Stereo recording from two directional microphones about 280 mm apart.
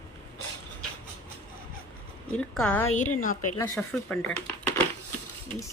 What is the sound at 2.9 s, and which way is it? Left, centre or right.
Speech, left.